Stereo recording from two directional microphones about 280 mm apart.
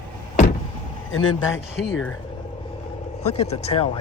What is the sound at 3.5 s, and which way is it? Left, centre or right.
Speech, left.